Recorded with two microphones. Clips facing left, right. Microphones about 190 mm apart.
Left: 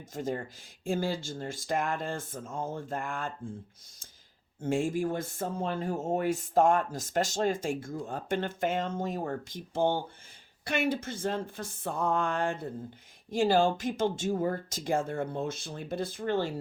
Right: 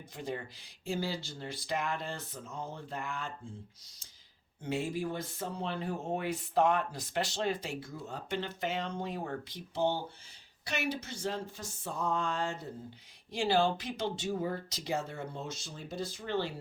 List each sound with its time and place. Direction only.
0.1 s speech: 45° left (ahead or behind)
4.6 s speech: 50° left (ahead or behind)